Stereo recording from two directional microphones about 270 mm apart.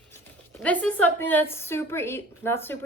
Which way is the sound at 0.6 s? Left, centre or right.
Centre.